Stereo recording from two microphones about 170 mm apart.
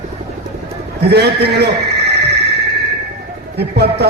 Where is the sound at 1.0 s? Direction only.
75° right (ahead or behind).